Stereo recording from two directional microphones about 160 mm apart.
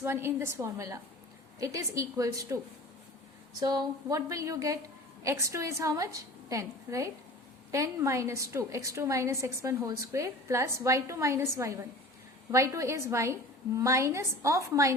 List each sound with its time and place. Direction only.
0.0 s a woman's voice: 15° right (ahead or behind)
3.6 s a woman's voice: 20° right (ahead or behind)